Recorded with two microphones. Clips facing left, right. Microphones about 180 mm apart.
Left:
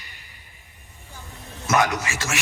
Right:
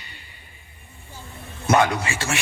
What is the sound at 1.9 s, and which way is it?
Speech, 30° right (ahead or behind).